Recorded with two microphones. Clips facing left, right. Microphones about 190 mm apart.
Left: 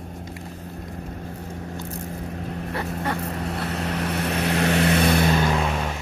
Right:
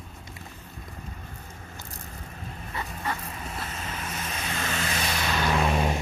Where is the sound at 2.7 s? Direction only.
65° left (ahead or behind).